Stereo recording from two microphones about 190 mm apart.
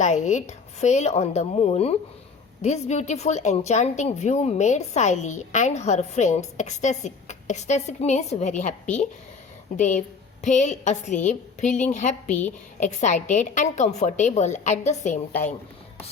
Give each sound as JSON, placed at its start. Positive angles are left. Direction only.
{"t": 0.0, "sound": "a woman's voice", "side_deg": 40}